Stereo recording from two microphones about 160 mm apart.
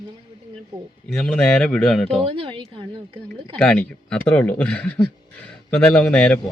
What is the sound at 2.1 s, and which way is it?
Speech, 35° right (ahead or behind).